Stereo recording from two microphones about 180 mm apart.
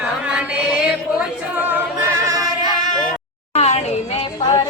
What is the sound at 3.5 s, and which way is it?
Music, 35° left (ahead or behind).